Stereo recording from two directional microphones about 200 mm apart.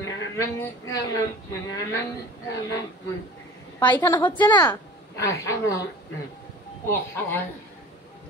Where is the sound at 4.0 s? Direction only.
10° left (ahead or behind).